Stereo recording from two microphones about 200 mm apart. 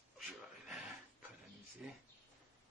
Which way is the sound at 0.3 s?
Centre (ahead or behind).